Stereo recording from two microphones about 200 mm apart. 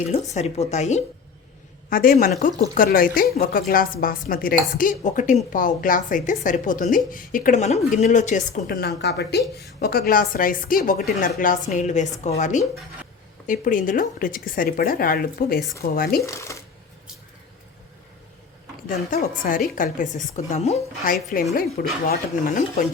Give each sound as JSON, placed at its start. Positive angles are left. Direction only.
{"t": 0.1, "sound": "speech", "side_deg": 35}
{"t": 16.2, "sound": "speech", "side_deg": 15}
{"t": 19.1, "sound": "speech", "side_deg": 40}